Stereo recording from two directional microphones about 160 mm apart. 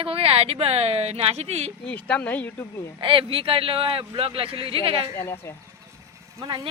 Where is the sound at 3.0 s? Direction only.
35° right (ahead or behind).